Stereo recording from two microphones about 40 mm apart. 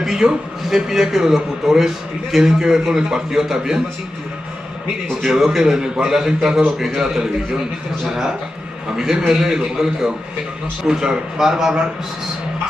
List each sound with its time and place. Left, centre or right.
0.0 s a man's voice: centre
5.2 s a man's voice: centre